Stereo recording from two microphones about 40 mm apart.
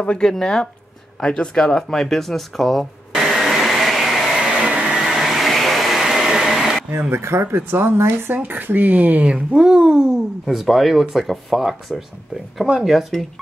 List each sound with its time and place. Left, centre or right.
0.2 s speech: centre
1.2 s speech: left; by 2.9 s centre
3.2 s vacuum cleaner: centre
4.4 s vehicle: right
4.9 s vehicle: centre
6.9 s speech: right
8.4 s speech: right
9.2 s speech: right
10.5 s speech: centre
12.7 s speech: centre